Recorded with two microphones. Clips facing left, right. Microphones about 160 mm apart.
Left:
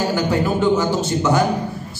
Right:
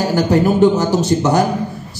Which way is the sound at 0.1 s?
40° right (ahead or behind).